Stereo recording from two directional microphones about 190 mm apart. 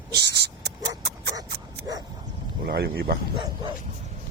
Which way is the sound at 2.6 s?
55° right (ahead or behind).